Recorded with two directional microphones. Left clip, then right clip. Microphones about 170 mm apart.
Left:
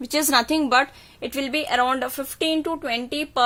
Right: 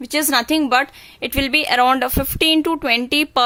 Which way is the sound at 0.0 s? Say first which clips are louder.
Right 2 dB; 10° right (ahead or behind).